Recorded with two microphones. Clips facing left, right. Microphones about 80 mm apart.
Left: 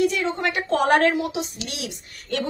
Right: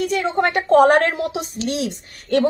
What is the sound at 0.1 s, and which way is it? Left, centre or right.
A woman's voice, right.